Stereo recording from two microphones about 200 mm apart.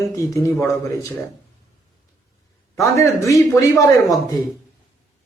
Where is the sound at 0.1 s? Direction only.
15° left (ahead or behind).